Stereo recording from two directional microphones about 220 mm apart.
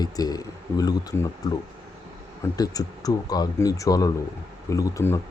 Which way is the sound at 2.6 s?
15° left (ahead or behind).